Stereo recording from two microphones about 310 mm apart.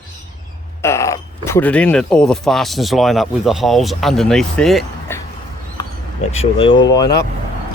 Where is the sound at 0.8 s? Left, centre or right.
Centre.